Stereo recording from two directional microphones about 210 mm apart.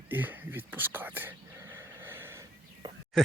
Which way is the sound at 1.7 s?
10° right (ahead or behind).